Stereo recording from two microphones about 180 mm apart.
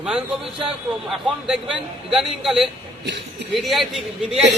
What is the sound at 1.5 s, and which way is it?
A man's voice, 5° right (ahead or behind).